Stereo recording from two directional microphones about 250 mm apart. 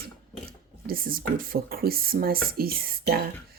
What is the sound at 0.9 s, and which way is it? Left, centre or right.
Speech, right.